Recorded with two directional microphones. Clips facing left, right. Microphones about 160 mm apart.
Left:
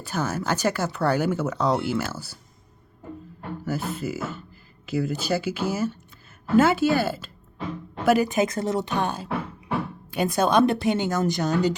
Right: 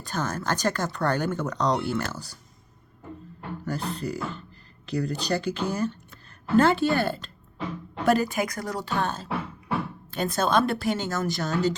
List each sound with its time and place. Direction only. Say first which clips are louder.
0.0 s speech: left 2 dB; 10° left (ahead or behind)
3.7 s speech: left 2 dB; 5° left (ahead or behind)